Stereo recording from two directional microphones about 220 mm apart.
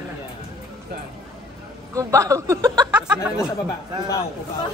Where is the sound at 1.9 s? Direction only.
15° right (ahead or behind).